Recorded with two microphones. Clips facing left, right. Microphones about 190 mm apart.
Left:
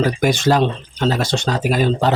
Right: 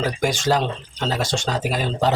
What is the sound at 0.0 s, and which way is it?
Speech, 65° left (ahead or behind).